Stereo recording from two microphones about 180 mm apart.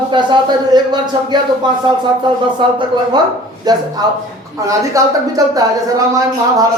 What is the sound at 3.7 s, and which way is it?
A man's voice, 20° right (ahead or behind).